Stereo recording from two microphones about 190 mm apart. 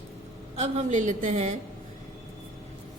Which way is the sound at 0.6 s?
40° right (ahead or behind).